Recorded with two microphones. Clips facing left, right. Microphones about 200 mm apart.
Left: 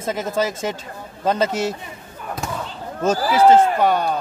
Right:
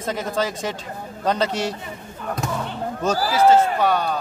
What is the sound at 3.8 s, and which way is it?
Speech, 20° left (ahead or behind).